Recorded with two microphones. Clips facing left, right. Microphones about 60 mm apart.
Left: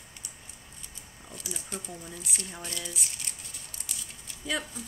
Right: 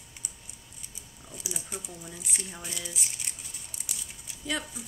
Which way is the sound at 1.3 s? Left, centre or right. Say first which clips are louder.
Even; centre.